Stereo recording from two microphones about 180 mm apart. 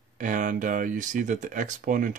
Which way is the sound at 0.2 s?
45° right (ahead or behind).